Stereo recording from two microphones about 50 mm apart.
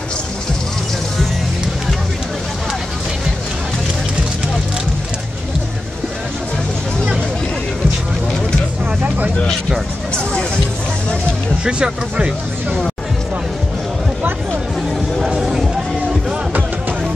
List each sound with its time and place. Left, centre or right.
11.6 s speech: centre
15.1 s music: centre